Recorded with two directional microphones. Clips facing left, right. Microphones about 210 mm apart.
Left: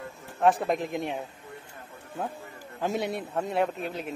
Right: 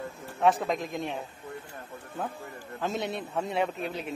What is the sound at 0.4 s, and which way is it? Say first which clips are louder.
Speech: left 2 dB; 10° left (ahead or behind).